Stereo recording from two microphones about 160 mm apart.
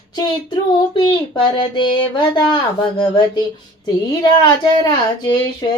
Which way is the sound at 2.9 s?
30° left (ahead or behind).